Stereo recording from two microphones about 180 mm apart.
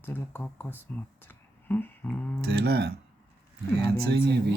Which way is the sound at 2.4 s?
65° right (ahead or behind).